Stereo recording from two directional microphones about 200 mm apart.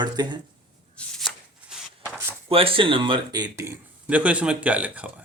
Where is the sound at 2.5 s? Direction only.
30° right (ahead or behind); by 5.1 s 5° right (ahead or behind).